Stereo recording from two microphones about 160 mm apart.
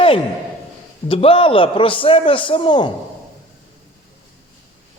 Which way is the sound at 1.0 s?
35° left (ahead or behind).